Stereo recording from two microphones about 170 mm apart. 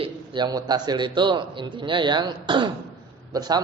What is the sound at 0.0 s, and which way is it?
A man's voice, 25° right (ahead or behind).